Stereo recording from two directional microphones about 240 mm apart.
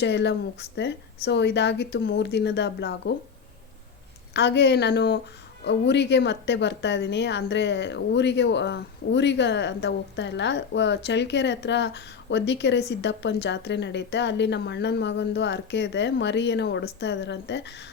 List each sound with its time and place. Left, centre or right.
0.0 s a woman's voice: left
4.4 s a woman's voice: left